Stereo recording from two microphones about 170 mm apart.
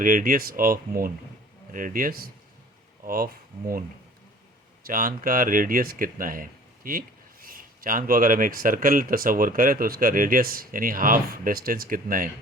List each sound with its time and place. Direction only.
0.0 s speech: 55° right (ahead or behind)
4.8 s speech: 55° right (ahead or behind)